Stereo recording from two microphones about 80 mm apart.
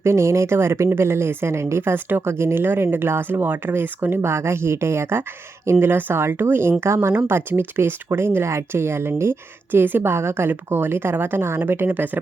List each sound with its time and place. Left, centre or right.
0.0 s speech: right